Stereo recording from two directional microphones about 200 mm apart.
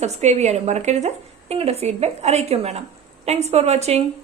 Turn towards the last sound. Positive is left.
turn(degrees=-35)  # may be behind; listen again after turning